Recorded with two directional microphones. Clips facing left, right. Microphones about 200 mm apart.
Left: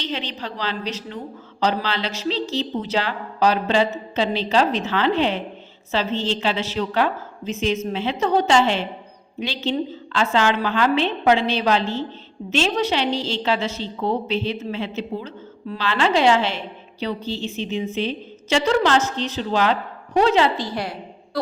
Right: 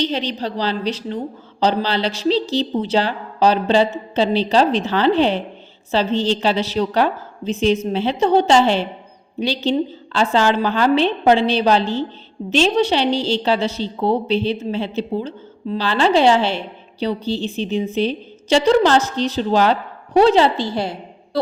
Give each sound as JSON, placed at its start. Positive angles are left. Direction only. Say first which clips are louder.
{"t": 0.0, "sound": "a woman's voice", "louder": "right 7 dB", "side_deg": -35}